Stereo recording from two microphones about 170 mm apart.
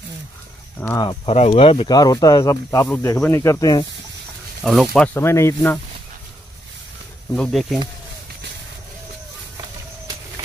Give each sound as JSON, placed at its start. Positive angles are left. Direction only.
{"t": 0.9, "sound": "speech", "side_deg": 30}
{"t": 4.6, "sound": "speech", "side_deg": 5}
{"t": 7.3, "sound": "speech", "side_deg": 0}